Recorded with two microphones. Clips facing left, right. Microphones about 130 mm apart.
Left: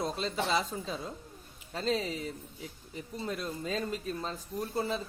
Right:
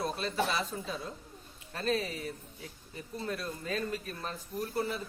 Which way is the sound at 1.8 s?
20° left (ahead or behind).